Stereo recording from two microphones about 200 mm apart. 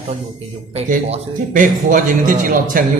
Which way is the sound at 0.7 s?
35° right (ahead or behind).